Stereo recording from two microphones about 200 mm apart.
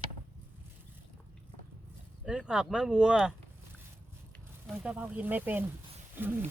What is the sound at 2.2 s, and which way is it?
Speech, 5° right (ahead or behind).